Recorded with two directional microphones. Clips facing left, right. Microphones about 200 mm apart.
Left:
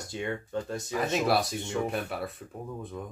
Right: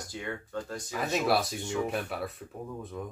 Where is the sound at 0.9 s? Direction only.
Centre (ahead or behind).